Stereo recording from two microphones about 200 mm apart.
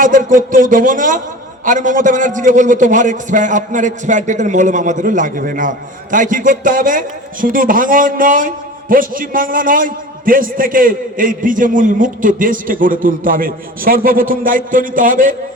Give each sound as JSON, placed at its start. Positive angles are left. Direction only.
{"t": 0.0, "sound": "a man's voice", "side_deg": -40}